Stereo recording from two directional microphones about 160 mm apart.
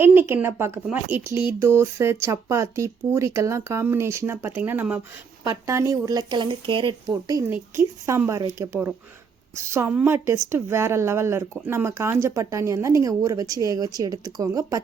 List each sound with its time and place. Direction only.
0.0 s speech: 15° right (ahead or behind)